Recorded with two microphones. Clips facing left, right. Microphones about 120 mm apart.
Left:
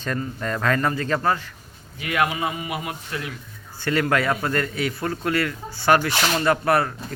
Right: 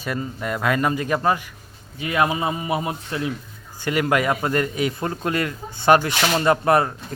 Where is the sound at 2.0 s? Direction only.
25° right (ahead or behind).